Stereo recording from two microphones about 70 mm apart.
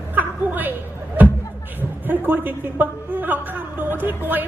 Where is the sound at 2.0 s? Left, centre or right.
Right.